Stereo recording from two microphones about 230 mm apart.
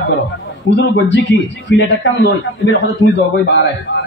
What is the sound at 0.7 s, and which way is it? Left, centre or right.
A man's voice, left.